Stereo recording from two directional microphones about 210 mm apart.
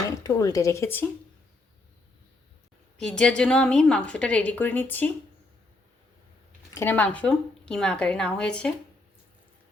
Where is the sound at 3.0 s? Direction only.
5° left (ahead or behind).